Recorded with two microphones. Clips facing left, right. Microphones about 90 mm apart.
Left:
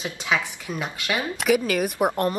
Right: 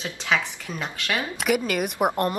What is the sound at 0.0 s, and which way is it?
Speech, 10° left (ahead or behind).